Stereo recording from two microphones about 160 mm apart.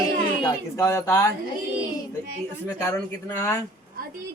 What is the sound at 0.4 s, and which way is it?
Speech, 20° left (ahead or behind).